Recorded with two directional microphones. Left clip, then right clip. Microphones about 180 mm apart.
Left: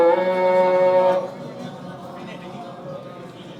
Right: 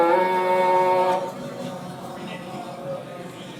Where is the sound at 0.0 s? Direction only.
40° left (ahead or behind).